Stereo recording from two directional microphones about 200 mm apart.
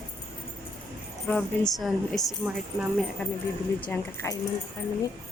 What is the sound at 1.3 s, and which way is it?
A woman's voice, 5° left (ahead or behind).